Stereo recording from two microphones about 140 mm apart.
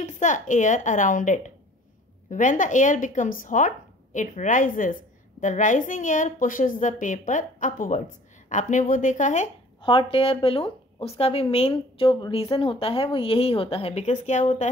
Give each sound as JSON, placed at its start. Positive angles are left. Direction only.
{"t": 0.0, "sound": "a woman's voice", "side_deg": 65}
{"t": 5.4, "sound": "a woman's voice", "side_deg": 65}
{"t": 9.8, "sound": "a sound", "side_deg": 40}
{"t": 10.1, "sound": "speech", "side_deg": 40}